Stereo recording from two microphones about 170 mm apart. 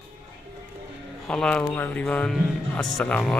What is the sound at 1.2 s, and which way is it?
Speech, 5° left (ahead or behind).